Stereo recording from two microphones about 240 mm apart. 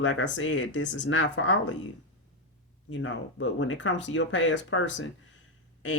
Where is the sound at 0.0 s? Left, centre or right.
Left.